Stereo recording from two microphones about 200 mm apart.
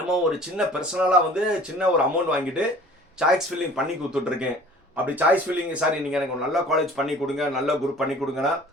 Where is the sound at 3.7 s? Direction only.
5° right (ahead or behind).